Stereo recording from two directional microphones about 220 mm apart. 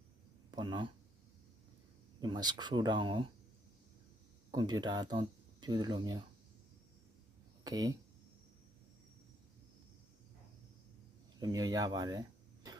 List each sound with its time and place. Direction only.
0.5 s speech: 20° right (ahead or behind)
2.2 s speech: 20° right (ahead or behind)
4.5 s speech: 20° right (ahead or behind)
7.6 s speech: 15° right (ahead or behind)
11.3 s speech: 20° right (ahead or behind)